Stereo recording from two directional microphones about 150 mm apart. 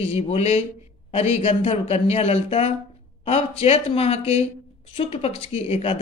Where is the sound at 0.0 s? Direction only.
40° left (ahead or behind).